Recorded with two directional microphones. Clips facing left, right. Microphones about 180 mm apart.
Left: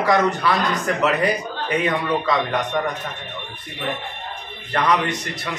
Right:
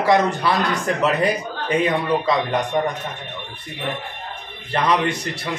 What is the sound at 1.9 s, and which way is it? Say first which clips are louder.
Speech: right 1 dB; 30° right (ahead or behind).